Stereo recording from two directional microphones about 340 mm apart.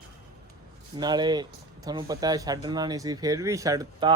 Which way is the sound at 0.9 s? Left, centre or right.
Centre.